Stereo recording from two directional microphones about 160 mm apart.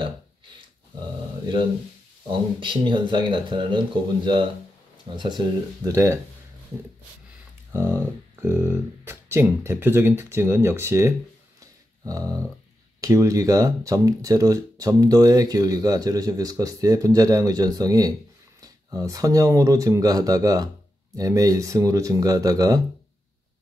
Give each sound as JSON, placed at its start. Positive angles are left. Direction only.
{"t": 2.6, "sound": "speech", "side_deg": -30}
{"t": 7.7, "sound": "speech", "side_deg": -15}
{"t": 11.6, "sound": "a sound", "side_deg": -20}
{"t": 13.0, "sound": "speech", "side_deg": -20}